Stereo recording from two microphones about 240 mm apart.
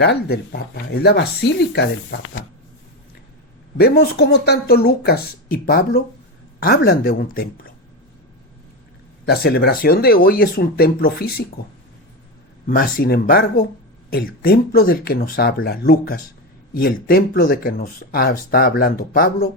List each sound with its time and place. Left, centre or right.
0.0 s speech: left
3.8 s speech: left
9.3 s speech: left
12.6 s speech: left